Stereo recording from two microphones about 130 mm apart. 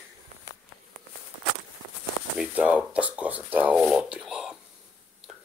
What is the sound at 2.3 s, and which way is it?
Speech, 10° right (ahead or behind).